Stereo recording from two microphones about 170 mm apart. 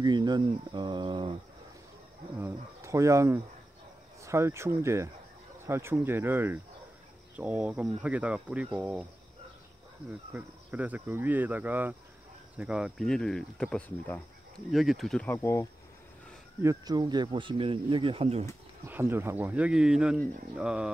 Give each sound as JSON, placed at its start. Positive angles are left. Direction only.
{"t": 0.0, "sound": "speech", "side_deg": -25}
{"t": 2.3, "sound": "speech", "side_deg": -15}
{"t": 10.3, "sound": "speech", "side_deg": -10}
{"t": 14.7, "sound": "speech", "side_deg": 0}
{"t": 16.6, "sound": "speech", "side_deg": -25}
{"t": 18.9, "sound": "speech", "side_deg": -10}